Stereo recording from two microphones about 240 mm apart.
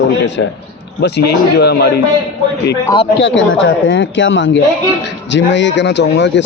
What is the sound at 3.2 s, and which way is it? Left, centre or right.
Speech, left.